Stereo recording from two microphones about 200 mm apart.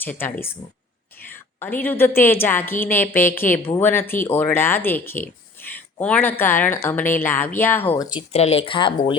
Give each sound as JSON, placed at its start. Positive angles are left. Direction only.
{"t": 0.0, "sound": "speech", "side_deg": 10}
{"t": 8.1, "sound": "speech", "side_deg": 30}